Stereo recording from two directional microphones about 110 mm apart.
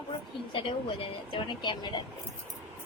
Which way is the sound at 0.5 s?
50° left (ahead or behind).